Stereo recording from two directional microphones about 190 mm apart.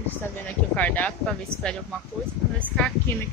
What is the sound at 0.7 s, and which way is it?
Speech, 10° left (ahead or behind).